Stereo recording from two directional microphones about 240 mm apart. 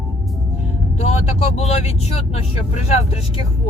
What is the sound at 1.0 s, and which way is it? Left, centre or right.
Speech, left.